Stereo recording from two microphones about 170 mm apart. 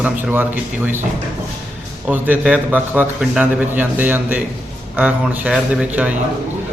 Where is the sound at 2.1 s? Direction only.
10° right (ahead or behind).